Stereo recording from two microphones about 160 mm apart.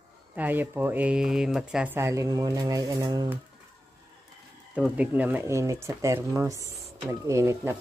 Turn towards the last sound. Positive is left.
turn(degrees=-20)  # may be behind; listen again after turning